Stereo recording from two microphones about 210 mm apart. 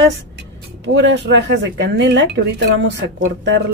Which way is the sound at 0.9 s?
60° right (ahead or behind).